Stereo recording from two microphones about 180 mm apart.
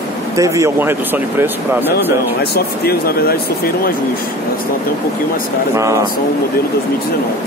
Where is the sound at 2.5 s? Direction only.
60° left (ahead or behind).